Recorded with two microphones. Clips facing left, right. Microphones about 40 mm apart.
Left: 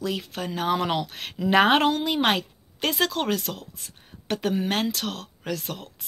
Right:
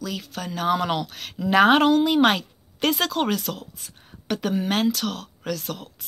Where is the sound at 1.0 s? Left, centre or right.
Left.